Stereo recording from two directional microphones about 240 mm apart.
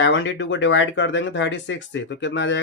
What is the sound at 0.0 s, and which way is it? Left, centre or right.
Speech, left.